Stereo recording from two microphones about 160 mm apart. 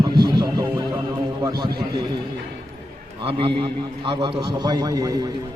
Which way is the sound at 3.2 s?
35° right (ahead or behind).